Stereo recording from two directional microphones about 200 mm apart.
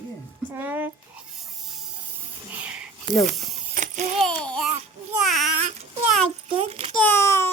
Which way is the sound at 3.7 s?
40° right (ahead or behind).